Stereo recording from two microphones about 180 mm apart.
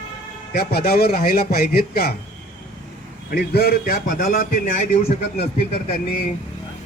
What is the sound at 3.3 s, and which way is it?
A man's voice, 60° left (ahead or behind).